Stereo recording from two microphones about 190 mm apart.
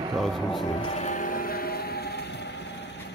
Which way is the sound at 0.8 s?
35° left (ahead or behind).